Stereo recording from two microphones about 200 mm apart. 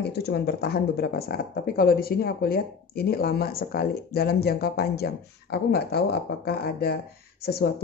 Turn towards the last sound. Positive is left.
turn(degrees=55)  # may be behind; listen again after turning